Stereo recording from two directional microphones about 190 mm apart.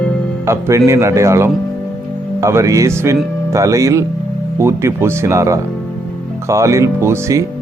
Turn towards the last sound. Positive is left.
turn(degrees=-15)  # may be behind; listen again after turning